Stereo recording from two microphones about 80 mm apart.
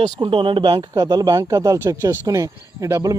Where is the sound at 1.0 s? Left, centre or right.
Right.